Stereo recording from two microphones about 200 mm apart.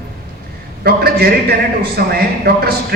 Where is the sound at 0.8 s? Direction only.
50° right (ahead or behind).